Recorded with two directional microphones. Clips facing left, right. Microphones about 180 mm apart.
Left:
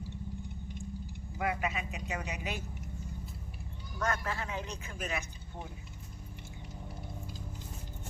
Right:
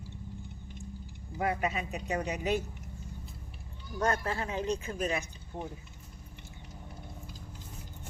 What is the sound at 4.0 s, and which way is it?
Speech, 35° right (ahead or behind).